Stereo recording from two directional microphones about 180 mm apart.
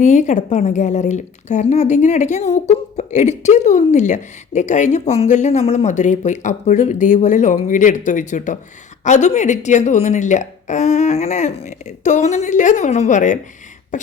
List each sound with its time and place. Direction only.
0.0 s a woman's voice: 40° left (ahead or behind)
13.9 s beatboxing: 45° left (ahead or behind)